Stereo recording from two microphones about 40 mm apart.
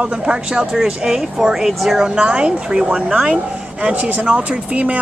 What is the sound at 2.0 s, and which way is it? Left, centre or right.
A woman's voice, right.